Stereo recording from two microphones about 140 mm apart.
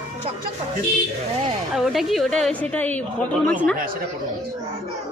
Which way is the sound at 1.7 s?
Centre (ahead or behind).